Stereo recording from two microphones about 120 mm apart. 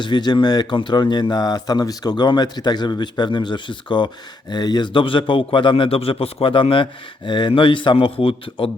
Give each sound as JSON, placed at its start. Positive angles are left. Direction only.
{"t": 0.0, "sound": "a man's voice", "side_deg": 35}